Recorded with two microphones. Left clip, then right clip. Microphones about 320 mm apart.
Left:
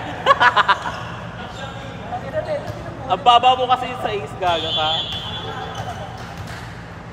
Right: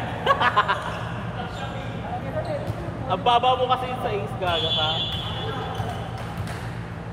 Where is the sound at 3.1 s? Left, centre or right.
Left.